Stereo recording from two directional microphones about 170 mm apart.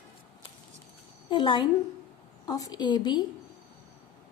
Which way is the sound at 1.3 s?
30° left (ahead or behind).